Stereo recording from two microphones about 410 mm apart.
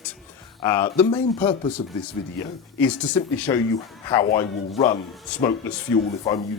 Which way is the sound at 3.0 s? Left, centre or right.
Centre.